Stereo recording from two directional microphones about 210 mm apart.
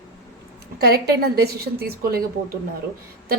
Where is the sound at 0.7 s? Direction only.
50° right (ahead or behind).